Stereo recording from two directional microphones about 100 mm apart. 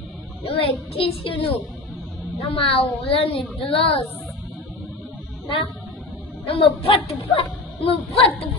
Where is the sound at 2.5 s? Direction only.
65° left (ahead or behind).